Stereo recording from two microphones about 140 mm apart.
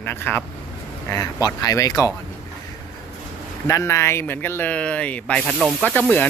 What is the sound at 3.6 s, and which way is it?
Speech, 20° left (ahead or behind).